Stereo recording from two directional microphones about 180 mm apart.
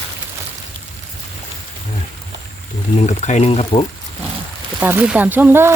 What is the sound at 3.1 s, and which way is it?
Speech, 40° left (ahead or behind).